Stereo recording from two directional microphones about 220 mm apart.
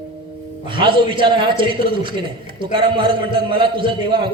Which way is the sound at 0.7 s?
20° right (ahead or behind).